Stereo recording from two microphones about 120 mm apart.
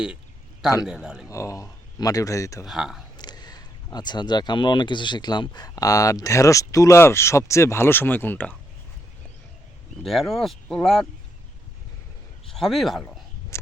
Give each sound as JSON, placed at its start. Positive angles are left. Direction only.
{"t": 0.9, "sound": "speech", "side_deg": -5}
{"t": 1.3, "sound": "speech", "side_deg": 25}
{"t": 2.6, "sound": "speech", "side_deg": -5}
{"t": 3.2, "sound": "speech", "side_deg": 35}
{"t": 10.0, "sound": "speech", "side_deg": 0}
{"t": 12.5, "sound": "speech", "side_deg": 0}
{"t": 13.5, "sound": "a sound", "side_deg": 20}